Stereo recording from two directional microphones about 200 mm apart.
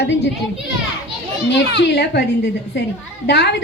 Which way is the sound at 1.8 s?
60° left (ahead or behind).